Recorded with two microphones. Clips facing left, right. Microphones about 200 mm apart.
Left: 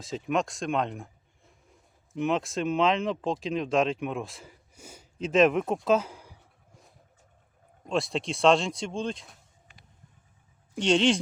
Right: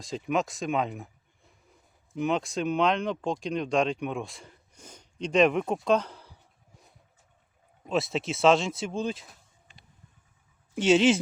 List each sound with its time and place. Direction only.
0.0 s speech: centre (ahead or behind)
7.9 s speech: 5° right (ahead or behind)
9.7 s vehicle: 25° right (ahead or behind)
10.8 s speech: 5° right (ahead or behind)